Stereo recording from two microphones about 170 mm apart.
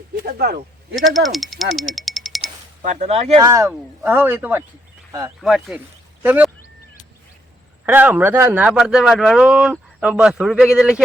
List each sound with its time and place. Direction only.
0.2 s speech: 65° right (ahead or behind)
0.9 s speech: centre (ahead or behind)
1.7 s a sound: centre (ahead or behind)
2.8 s speech: 45° right (ahead or behind)
3.4 s speech: 20° right (ahead or behind)
5.4 s speech: centre (ahead or behind)
7.9 s speech: 10° right (ahead or behind)